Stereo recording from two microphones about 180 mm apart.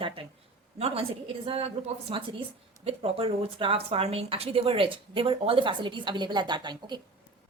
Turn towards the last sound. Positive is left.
turn(degrees=-25)  # may be behind; listen again after turning